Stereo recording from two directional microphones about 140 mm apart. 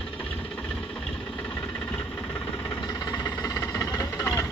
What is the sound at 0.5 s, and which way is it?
Engine, 5° left (ahead or behind).